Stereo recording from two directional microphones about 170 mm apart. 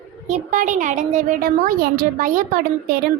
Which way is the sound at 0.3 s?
45° right (ahead or behind).